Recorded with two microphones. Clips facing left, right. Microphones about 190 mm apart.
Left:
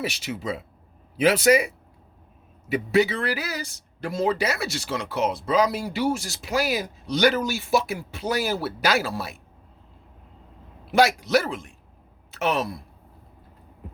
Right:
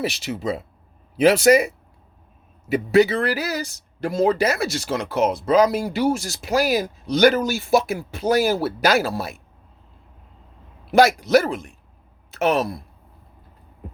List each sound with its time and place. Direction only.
0.0 s speech: 40° right (ahead or behind)
10.9 s speech: 45° right (ahead or behind)